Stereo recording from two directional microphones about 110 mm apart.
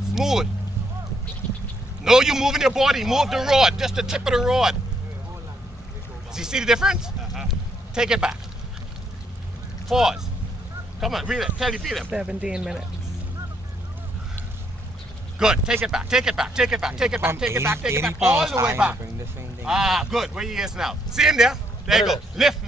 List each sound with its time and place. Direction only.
0.1 s speech: 5° right (ahead or behind)
2.0 s speech: 5° right (ahead or behind)
6.3 s speech: 5° right (ahead or behind)
9.8 s speech: 5° right (ahead or behind)
15.3 s speech: 5° right (ahead or behind)
17.5 s speech: 25° right (ahead or behind)
19.6 s speech: 5° right (ahead or behind)